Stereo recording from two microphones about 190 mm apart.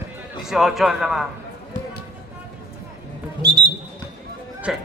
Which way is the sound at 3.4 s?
55° right (ahead or behind).